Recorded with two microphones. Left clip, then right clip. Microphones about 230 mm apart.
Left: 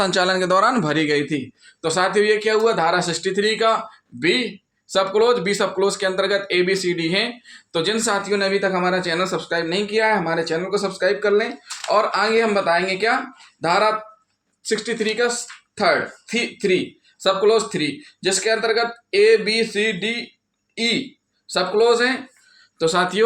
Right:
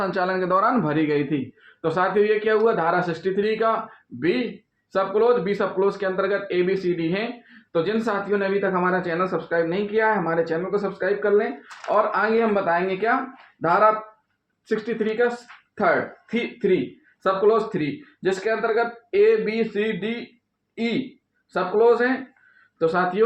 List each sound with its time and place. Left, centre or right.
0.0 s speech: left
4.9 s speech: left
21.5 s speech: left